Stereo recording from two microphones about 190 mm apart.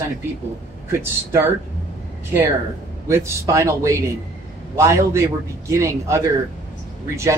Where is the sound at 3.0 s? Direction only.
15° right (ahead or behind).